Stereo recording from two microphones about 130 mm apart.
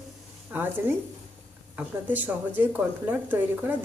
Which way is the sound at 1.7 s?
15° right (ahead or behind).